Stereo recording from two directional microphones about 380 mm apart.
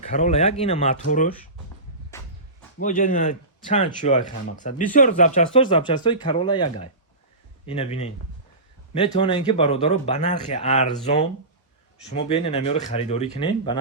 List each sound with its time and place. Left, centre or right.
0.0 s a man's voice: centre
2.1 s a sound: centre
2.7 s a man's voice: centre